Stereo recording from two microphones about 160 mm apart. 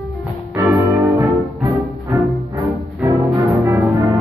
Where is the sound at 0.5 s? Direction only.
20° right (ahead or behind).